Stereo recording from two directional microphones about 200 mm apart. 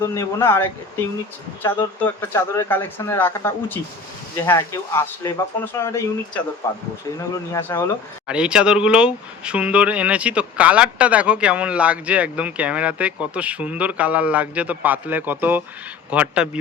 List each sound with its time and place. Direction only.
0.0 s speech: 15° left (ahead or behind)
8.3 s speech: 5° right (ahead or behind)